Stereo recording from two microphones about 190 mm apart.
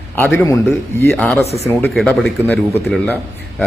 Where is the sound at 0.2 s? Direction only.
10° left (ahead or behind).